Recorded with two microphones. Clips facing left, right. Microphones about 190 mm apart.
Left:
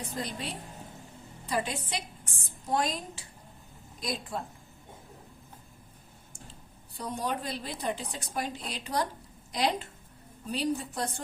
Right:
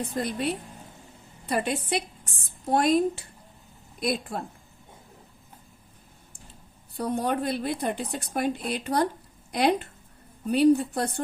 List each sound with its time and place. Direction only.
0.1 s a woman's voice: 60° right (ahead or behind)
6.9 s a woman's voice: 60° right (ahead or behind)